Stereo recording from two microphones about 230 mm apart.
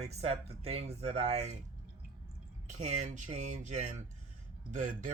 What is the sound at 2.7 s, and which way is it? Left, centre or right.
Speech, right.